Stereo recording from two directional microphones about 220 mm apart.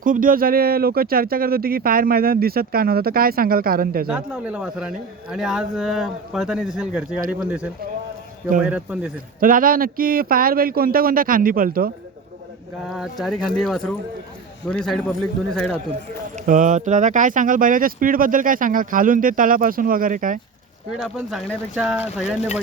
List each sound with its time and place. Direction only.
0.0 s speech: 40° right (ahead or behind)
4.0 s a man's voice: 5° right (ahead or behind)
8.7 s a man's voice: 5° right (ahead or behind)
9.4 s speech: 40° right (ahead or behind)
12.9 s a man's voice: centre (ahead or behind)
16.3 s speech: 35° right (ahead or behind)
21.0 s a man's voice: centre (ahead or behind)